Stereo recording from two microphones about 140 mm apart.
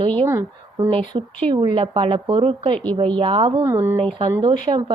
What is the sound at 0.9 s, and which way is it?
Speech, 35° right (ahead or behind).